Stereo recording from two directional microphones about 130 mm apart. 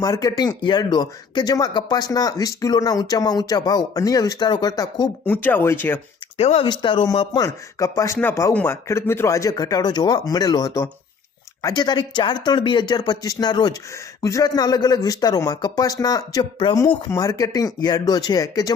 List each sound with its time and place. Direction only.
0.0 s speech: 25° left (ahead or behind)
5.2 s speech: 15° left (ahead or behind)
6.3 s speech: 50° left (ahead or behind)
6.7 s speech: 35° left (ahead or behind)
17.1 s speech: 25° left (ahead or behind)